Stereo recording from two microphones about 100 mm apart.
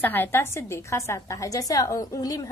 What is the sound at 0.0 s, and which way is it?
A woman's voice, 20° left (ahead or behind).